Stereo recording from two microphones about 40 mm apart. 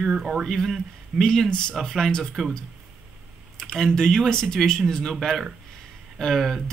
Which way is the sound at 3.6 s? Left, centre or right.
Centre.